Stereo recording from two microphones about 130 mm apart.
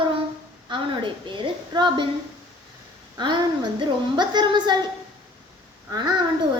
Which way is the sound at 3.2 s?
35° right (ahead or behind).